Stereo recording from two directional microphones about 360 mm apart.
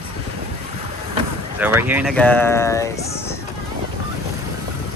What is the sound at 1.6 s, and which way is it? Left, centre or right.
Speech, centre.